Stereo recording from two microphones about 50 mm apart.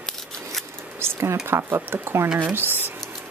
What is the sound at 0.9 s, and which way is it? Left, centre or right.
Speech, right.